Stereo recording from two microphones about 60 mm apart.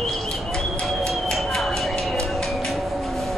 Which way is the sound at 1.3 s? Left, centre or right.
Centre.